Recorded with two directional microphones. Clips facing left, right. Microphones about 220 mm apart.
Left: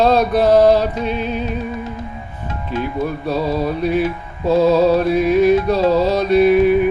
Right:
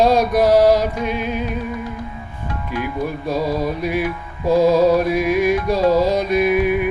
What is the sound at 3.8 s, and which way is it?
Music, 10° right (ahead or behind).